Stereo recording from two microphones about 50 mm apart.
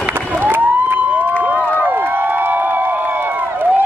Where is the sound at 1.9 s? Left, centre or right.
Right.